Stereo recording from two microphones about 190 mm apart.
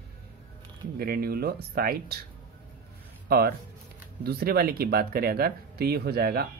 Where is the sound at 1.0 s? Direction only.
55° right (ahead or behind).